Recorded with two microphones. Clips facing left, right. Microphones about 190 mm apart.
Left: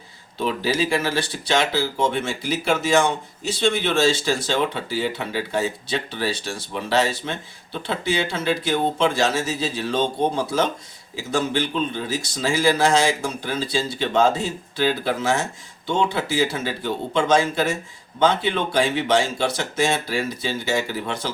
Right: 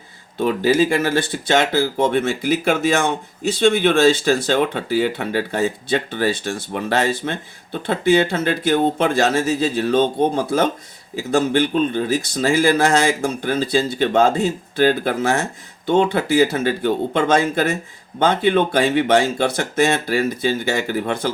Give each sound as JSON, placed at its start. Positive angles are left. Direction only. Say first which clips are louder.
{"t": 0.3, "sound": "speech", "louder": "right 6 dB", "side_deg": -50}